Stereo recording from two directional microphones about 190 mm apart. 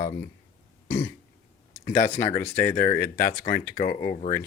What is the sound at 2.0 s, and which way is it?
Speech, 40° left (ahead or behind).